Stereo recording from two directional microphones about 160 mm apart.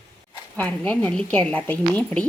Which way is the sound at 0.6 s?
10° left (ahead or behind).